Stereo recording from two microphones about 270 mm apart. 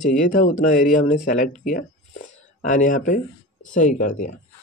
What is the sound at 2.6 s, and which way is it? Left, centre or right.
Speech, left.